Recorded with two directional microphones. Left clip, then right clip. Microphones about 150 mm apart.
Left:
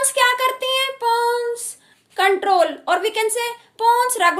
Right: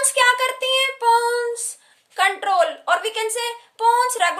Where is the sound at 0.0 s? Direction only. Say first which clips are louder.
Even; 10° left (ahead or behind).